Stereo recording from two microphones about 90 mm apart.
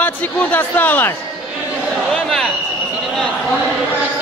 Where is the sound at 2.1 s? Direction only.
5° left (ahead or behind).